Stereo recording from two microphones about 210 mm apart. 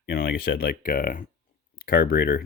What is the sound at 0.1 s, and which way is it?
Speech, 50° left (ahead or behind).